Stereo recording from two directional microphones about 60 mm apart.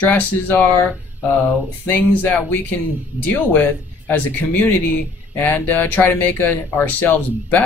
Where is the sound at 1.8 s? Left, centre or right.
Left.